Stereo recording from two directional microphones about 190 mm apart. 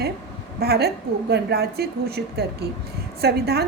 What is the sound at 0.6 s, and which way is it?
A woman's voice, 55° right (ahead or behind).